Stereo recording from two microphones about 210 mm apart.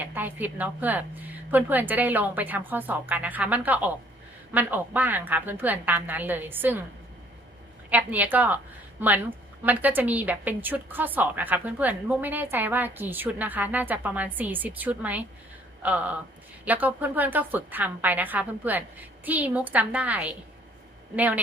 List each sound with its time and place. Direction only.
0.0 s a woman's voice: 10° right (ahead or behind)
7.9 s a woman's voice: 10° right (ahead or behind)